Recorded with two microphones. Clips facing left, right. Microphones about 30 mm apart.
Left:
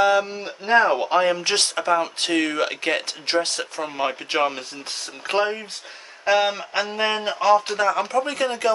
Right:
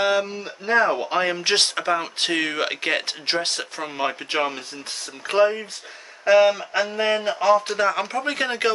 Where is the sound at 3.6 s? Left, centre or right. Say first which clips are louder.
Left 1 dB; centre.